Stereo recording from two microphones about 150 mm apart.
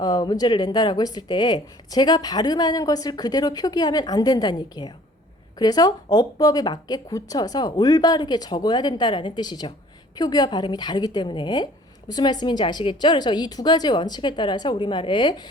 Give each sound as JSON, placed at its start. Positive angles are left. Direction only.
{"t": 0.0, "sound": "a woman's voice", "side_deg": 25}